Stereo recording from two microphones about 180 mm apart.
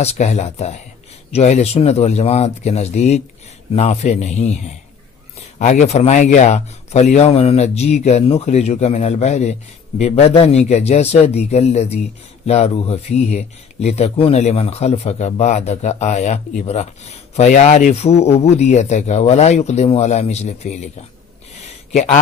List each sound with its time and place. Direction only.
0.0 s speech: 35° left (ahead or behind)
5.6 s speech: 40° left (ahead or behind)
21.9 s speech: 40° left (ahead or behind)